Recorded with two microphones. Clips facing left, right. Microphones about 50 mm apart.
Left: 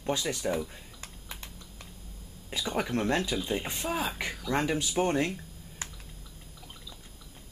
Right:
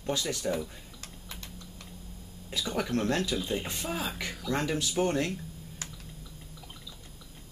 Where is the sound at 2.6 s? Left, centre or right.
Centre.